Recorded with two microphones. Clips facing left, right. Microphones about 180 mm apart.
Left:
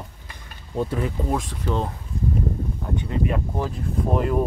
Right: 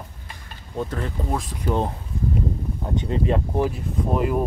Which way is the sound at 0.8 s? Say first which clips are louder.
Left 3 dB; 10° left (ahead or behind).